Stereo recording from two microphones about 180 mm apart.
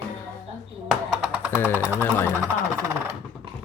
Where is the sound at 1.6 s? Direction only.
10° left (ahead or behind).